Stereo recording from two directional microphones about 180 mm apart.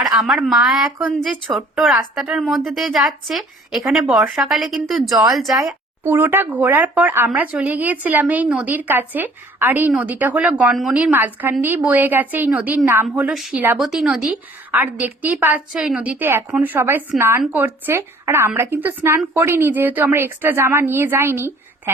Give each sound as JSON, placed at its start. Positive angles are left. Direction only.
{"t": 0.0, "sound": "a woman's voice", "side_deg": 0}
{"t": 5.5, "sound": "a woman's voice", "side_deg": -15}